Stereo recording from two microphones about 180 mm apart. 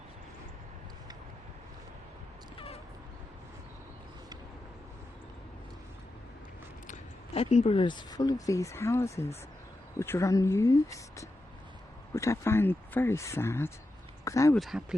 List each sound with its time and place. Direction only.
7.3 s speech: 30° left (ahead or behind); by 14.5 s 15° left (ahead or behind)
14.5 s speech: centre (ahead or behind)